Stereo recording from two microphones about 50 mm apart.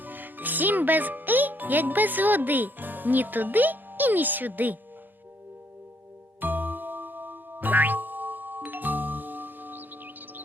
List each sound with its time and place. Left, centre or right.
0.0 s a child's voice: right
6.4 s music: right